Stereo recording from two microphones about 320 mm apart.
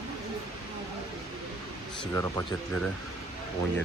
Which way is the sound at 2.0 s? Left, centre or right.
Centre.